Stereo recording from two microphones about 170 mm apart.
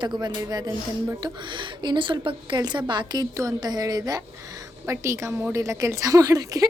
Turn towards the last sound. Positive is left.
turn(degrees=-20)  # may be behind; listen again after turning